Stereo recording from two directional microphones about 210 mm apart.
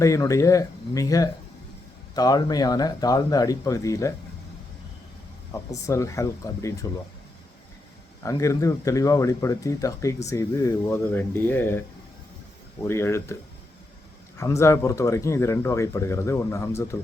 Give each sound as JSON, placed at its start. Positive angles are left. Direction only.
{"t": 0.0, "sound": "speech", "side_deg": 15}
{"t": 5.5, "sound": "speech", "side_deg": 15}
{"t": 8.2, "sound": "speech", "side_deg": 15}
{"t": 12.8, "sound": "speech", "side_deg": 10}
{"t": 14.3, "sound": "speech", "side_deg": 15}